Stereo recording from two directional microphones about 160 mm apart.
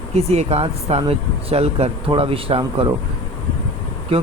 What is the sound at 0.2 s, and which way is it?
Speech, 40° right (ahead or behind).